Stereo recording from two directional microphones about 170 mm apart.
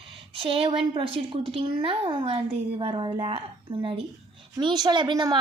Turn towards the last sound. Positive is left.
turn(degrees=-25)  # may be behind; listen again after turning